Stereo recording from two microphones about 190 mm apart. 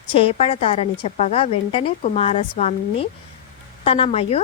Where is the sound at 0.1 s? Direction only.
30° left (ahead or behind).